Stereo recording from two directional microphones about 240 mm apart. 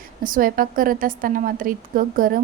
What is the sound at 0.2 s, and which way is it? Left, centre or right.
A woman's voice, right.